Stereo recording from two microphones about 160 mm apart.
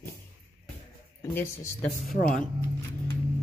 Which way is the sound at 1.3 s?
10° left (ahead or behind).